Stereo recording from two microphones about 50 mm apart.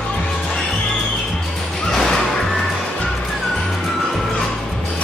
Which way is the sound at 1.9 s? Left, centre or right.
Centre.